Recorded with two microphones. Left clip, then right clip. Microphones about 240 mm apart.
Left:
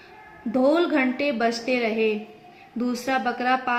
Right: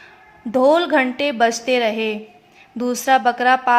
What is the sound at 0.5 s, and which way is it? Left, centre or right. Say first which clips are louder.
A woman's voice: right 6 dB; right.